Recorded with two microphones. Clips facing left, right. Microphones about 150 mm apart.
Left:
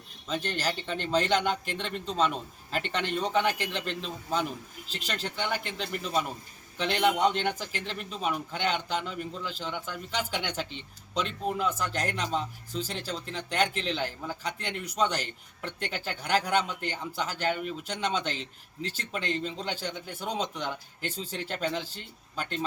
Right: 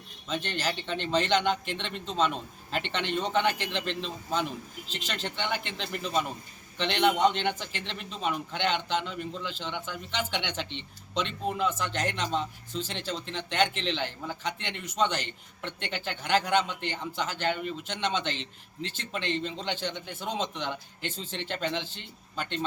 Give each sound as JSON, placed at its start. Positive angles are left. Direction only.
{"t": 0.6, "sound": "a man's voice", "side_deg": 0}
{"t": 18.3, "sound": "speech", "side_deg": 40}
{"t": 19.4, "sound": "a man's voice", "side_deg": 5}